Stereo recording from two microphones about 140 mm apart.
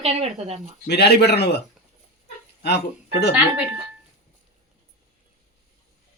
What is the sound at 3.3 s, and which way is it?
Speech, 10° right (ahead or behind).